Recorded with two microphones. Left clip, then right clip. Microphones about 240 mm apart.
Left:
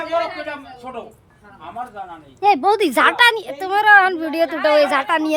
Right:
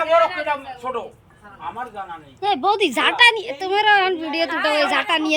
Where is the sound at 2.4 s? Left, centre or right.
Centre.